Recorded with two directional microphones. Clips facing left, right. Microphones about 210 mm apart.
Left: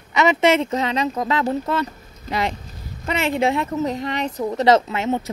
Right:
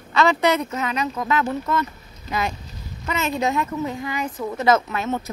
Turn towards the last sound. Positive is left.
turn(degrees=20)  # may be behind; listen again after turning